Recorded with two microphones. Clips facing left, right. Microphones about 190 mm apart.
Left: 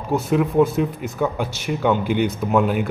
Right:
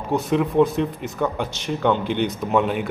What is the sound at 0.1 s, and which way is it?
A man's voice, 5° left (ahead or behind).